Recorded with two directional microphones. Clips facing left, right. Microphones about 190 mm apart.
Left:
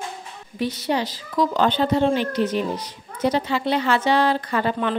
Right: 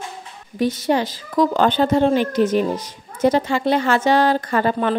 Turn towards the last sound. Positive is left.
turn(degrees=-45)  # may be behind; listen again after turning